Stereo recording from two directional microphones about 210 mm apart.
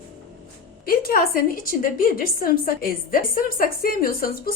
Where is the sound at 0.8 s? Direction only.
45° left (ahead or behind).